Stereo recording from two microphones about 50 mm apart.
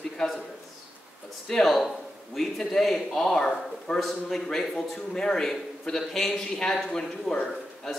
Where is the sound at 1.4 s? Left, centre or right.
Centre.